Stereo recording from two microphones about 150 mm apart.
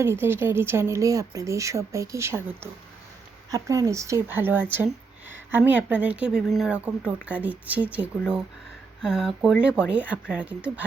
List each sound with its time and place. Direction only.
0.0 s speech: 15° right (ahead or behind)